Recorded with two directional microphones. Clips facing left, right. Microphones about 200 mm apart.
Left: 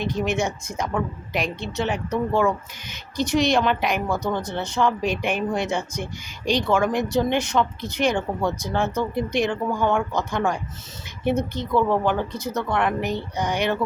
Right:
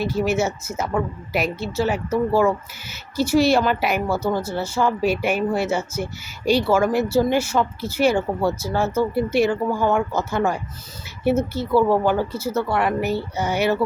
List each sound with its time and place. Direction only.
0.0 s speech: 5° right (ahead or behind)